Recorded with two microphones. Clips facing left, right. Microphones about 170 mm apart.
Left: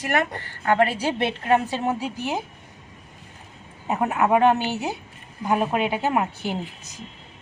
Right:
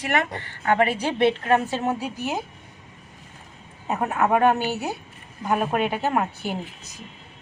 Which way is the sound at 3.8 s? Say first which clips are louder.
Left 1 dB; 15° left (ahead or behind).